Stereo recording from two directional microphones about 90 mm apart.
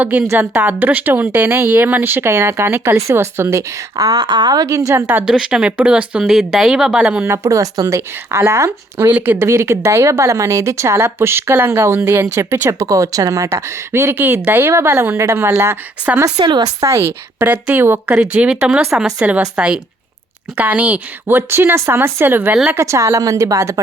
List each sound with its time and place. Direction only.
0.0 s speech: 15° right (ahead or behind)
3.9 s a woman's voice: 45° right (ahead or behind)
5.2 s speech: 5° right (ahead or behind)
7.3 s speech: 40° right (ahead or behind)
9.1 s speech: 20° right (ahead or behind)
9.4 s speech: 30° right (ahead or behind)
12.8 s speech: 40° right (ahead or behind)
16.4 s speech: 55° right (ahead or behind)
16.8 s speech: 30° right (ahead or behind)
17.4 s speech: 20° right (ahead or behind)
22.7 s speech: 35° right (ahead or behind)